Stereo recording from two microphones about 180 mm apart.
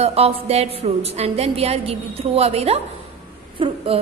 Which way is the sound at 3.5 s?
30° right (ahead or behind).